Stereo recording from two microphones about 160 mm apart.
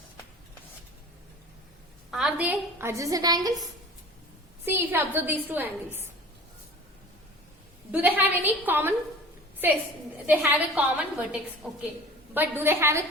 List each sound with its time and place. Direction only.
2.0 s a woman's voice: 5° right (ahead or behind); by 3.5 s 25° right (ahead or behind)
4.6 s a woman's voice: 15° right (ahead or behind)
7.9 s a woman's voice: 10° right (ahead or behind)